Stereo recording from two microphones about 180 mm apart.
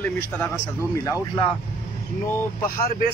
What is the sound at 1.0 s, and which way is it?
Speech, 20° left (ahead or behind).